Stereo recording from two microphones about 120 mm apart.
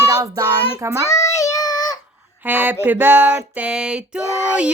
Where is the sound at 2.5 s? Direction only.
15° right (ahead or behind).